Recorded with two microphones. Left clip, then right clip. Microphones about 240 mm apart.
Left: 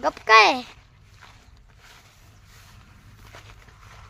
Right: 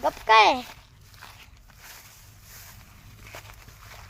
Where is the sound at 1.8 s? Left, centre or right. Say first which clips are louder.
Right 3 dB; right.